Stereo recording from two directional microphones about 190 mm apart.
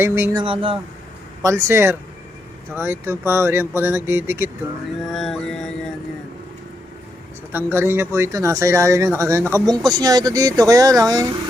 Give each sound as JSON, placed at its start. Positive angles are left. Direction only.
{"t": 0.0, "sound": "speech", "side_deg": -10}
{"t": 0.3, "sound": "speech", "side_deg": -25}
{"t": 1.4, "sound": "speech", "side_deg": -15}
{"t": 5.0, "sound": "music", "side_deg": 0}
{"t": 7.5, "sound": "speech", "side_deg": -10}